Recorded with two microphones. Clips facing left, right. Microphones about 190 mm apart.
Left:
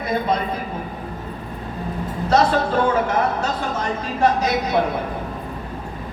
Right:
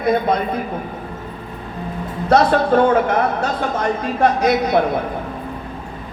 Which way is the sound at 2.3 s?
55° right (ahead or behind).